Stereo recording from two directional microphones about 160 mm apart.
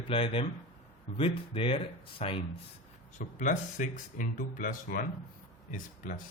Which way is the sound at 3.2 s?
50° left (ahead or behind).